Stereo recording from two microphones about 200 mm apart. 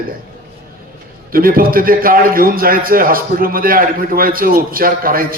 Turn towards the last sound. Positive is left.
turn(degrees=-45)  # may be behind; listen again after turning